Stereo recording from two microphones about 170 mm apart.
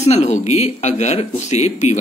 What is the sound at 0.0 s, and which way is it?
Speech, 40° left (ahead or behind).